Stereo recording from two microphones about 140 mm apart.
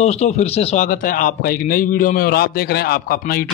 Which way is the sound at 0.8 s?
80° left.